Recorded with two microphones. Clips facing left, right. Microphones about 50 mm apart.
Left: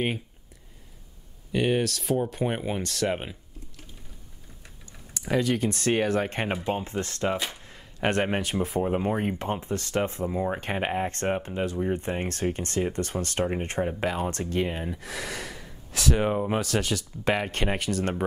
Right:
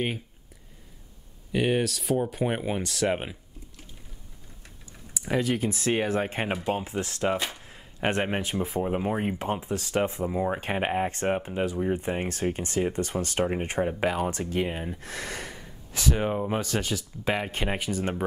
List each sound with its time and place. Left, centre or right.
1.5 s speech: centre
5.2 s speech: centre
6.8 s speech: centre
10.6 s speech: centre
13.8 s speech: centre
16.3 s speech: centre
16.5 s speech: centre